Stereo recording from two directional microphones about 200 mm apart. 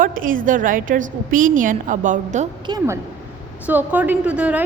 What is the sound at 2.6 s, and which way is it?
Speech, 20° right (ahead or behind).